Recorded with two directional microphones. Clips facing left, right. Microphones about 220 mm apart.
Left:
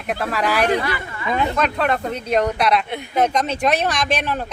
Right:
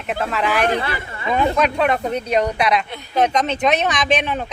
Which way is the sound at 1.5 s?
5° right (ahead or behind).